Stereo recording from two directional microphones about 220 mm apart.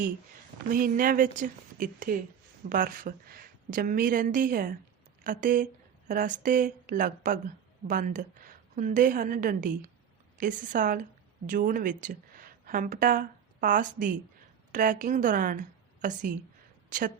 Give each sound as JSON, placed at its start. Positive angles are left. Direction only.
{"t": 0.7, "sound": "a woman's voice", "side_deg": -40}